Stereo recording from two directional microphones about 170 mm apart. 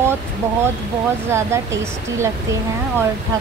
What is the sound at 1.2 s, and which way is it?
A woman's voice, 15° right (ahead or behind).